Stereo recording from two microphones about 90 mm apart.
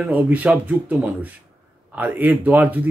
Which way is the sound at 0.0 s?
15° right (ahead or behind).